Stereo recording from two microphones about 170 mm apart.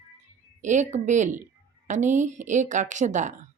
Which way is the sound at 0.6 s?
45° right (ahead or behind).